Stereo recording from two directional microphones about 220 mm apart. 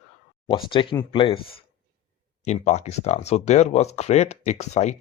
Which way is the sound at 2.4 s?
30° left (ahead or behind).